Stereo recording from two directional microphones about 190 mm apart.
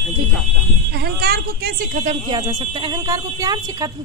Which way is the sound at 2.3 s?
20° right (ahead or behind).